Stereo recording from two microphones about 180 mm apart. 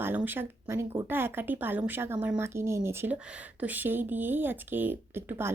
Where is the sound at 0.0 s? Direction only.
10° right (ahead or behind).